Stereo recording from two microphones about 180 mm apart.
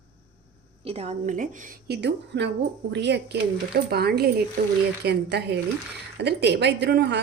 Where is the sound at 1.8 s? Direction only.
70° right (ahead or behind).